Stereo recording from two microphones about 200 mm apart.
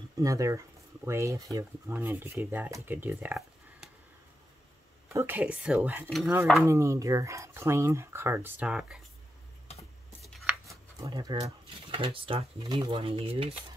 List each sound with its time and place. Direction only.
0.2 s speech: 15° right (ahead or behind)
5.1 s speech: 10° right (ahead or behind)
6.0 s stir: centre (ahead or behind)
6.6 s speech: 15° right (ahead or behind)
10.2 s a sound: centre (ahead or behind)
11.1 s speech: 20° right (ahead or behind)